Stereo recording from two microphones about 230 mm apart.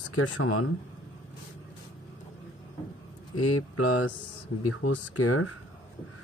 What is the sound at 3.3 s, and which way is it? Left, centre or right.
Speech, left.